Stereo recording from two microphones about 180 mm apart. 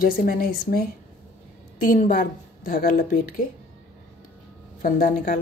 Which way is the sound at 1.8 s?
50° left (ahead or behind).